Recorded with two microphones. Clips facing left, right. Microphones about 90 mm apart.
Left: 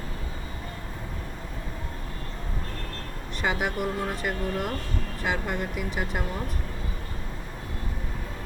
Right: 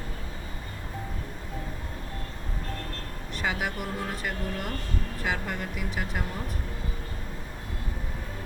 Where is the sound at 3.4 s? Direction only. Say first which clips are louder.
Left 4 dB; centre (ahead or behind).